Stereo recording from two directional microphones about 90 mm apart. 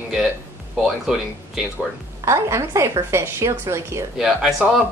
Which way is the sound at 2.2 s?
35° right (ahead or behind).